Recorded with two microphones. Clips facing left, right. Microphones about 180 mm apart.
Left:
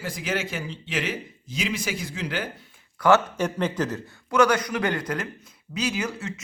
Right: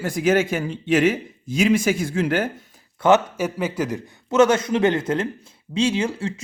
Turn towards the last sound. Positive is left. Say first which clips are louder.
# right 7 dB
turn(degrees=-25)  # may be behind; listen again after turning